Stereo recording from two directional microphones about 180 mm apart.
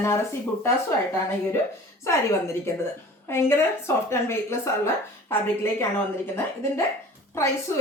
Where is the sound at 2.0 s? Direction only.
15° left (ahead or behind).